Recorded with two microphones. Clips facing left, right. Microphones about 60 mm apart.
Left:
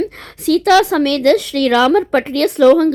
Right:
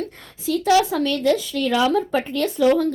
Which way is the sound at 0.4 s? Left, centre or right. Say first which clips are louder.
Left 6 dB; left.